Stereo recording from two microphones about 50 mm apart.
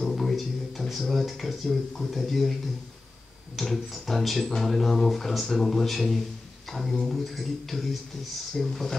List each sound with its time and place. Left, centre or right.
0.0 s speech: centre
3.5 s speech: centre